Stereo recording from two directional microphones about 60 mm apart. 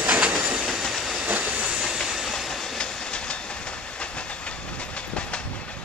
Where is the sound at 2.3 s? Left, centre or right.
Centre.